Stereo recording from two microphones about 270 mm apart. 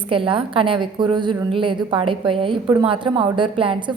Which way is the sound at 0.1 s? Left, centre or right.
Centre.